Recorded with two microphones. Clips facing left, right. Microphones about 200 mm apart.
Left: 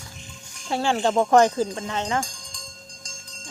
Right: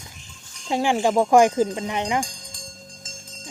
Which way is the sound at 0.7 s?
15° right (ahead or behind).